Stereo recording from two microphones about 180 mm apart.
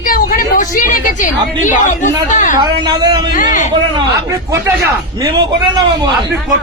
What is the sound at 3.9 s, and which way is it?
Speech, 15° right (ahead or behind).